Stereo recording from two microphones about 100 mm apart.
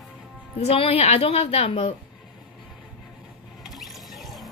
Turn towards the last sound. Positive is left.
turn(degrees=0)  # may be behind; listen again after turning